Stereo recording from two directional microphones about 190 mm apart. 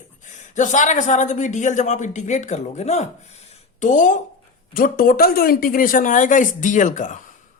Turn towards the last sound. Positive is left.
turn(degrees=40)  # may be behind; listen again after turning